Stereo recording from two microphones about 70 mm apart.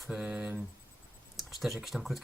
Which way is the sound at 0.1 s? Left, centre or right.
Centre.